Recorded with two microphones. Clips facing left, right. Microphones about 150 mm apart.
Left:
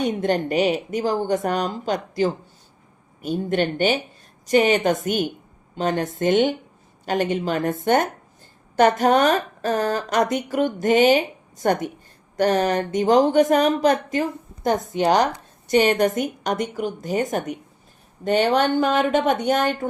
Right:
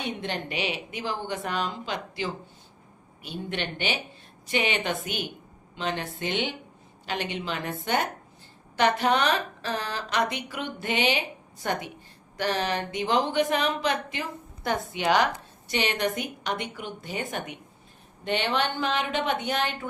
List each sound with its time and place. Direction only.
0.0 s speech: 45° left (ahead or behind)